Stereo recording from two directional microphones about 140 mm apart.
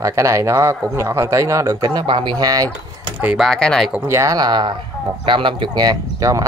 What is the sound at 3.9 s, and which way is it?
Speech, 15° right (ahead or behind).